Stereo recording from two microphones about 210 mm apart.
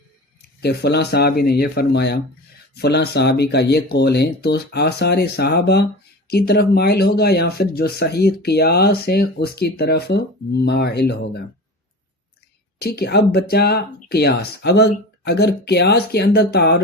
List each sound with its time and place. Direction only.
0.6 s speech: 50° left (ahead or behind)
12.8 s speech: 50° left (ahead or behind)